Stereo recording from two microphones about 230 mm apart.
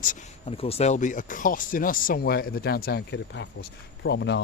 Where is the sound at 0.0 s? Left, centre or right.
Left.